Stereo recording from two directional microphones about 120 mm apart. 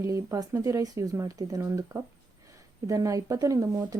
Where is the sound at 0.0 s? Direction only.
25° right (ahead or behind).